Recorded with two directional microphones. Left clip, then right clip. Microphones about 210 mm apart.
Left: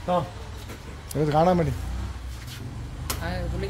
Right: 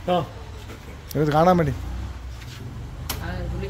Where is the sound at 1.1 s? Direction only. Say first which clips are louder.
Right 3 dB; 15° right (ahead or behind).